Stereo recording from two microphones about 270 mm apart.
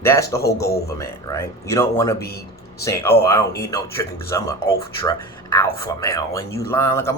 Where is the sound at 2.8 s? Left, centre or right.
Centre.